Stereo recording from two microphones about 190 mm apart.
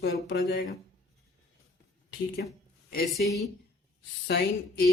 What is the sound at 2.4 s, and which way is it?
Speech, 55° left (ahead or behind).